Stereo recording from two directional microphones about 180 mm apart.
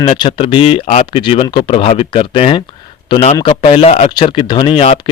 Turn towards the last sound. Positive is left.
turn(degrees=30)  # may be behind; listen again after turning